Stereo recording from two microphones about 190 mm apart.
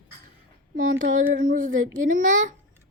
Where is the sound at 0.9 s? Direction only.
90° right.